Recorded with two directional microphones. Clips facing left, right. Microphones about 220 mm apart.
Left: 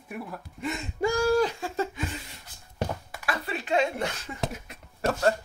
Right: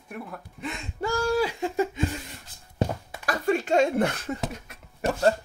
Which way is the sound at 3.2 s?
45° right (ahead or behind).